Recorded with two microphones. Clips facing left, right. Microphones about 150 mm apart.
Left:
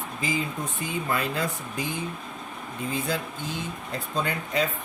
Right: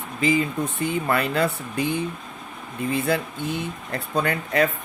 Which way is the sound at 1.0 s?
70° right (ahead or behind).